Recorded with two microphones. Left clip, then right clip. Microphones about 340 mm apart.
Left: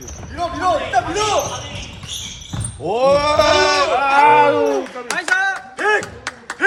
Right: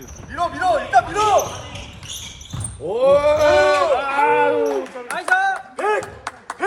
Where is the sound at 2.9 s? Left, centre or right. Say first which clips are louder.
Even; left.